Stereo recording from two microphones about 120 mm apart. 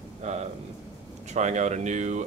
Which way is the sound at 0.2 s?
70° right (ahead or behind).